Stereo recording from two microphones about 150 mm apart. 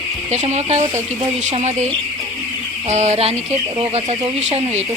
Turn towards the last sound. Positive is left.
turn(degrees=-45)  # may be behind; listen again after turning